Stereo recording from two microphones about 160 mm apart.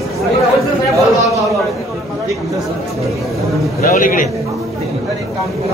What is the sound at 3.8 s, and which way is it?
Speech, 60° left (ahead or behind).